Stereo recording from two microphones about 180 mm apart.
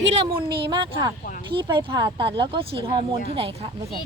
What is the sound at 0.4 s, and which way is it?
Speech, 25° right (ahead or behind).